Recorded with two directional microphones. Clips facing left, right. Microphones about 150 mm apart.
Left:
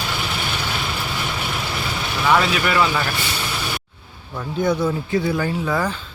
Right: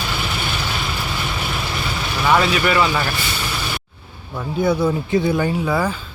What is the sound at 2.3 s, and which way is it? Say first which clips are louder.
Speech: right 2 dB; 5° right (ahead or behind).